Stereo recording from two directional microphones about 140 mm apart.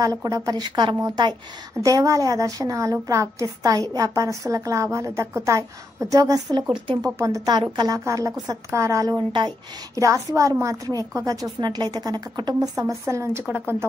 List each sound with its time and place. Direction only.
0.0 s a woman's voice: 25° right (ahead or behind)
7.2 s a woman's voice: 25° right (ahead or behind)